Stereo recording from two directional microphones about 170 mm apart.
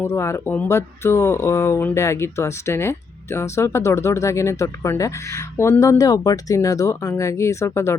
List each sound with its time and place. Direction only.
0.0 s speech: 15° left (ahead or behind)